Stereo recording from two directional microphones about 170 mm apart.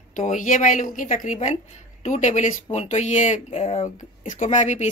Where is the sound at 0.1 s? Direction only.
50° left (ahead or behind).